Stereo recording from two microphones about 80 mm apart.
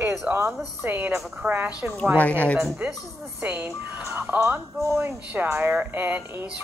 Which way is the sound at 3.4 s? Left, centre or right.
Centre.